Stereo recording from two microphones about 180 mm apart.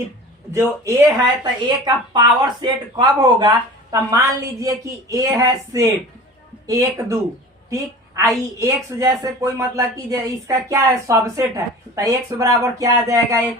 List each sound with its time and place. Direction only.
0.5 s a woman's voice: 15° right (ahead or behind)